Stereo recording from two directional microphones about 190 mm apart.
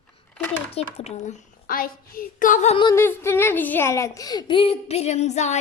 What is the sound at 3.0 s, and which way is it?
Speech, 10° left (ahead or behind).